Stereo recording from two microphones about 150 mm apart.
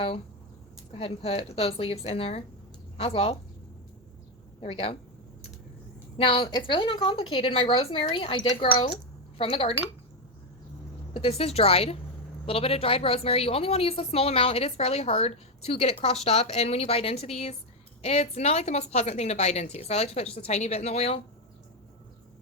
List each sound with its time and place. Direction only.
0.9 s a woman's voice: 40° left (ahead or behind)
4.6 s a woman's voice: 40° left (ahead or behind)
6.1 s a woman's voice: 35° left (ahead or behind)
11.1 s a woman's voice: 40° left (ahead or behind)